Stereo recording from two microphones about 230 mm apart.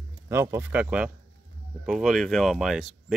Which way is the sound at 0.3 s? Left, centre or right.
Centre.